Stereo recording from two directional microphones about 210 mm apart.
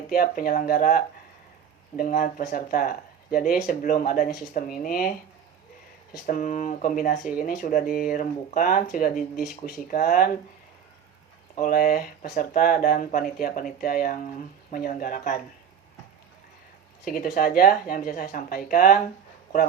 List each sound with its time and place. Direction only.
0.1 s speech: 40° left (ahead or behind)
6.2 s speech: 40° left (ahead or behind)
9.3 s speech: centre (ahead or behind)
9.6 s speech: 45° left (ahead or behind)
11.5 s speech: 45° left (ahead or behind)
17.1 s speech: 40° left (ahead or behind)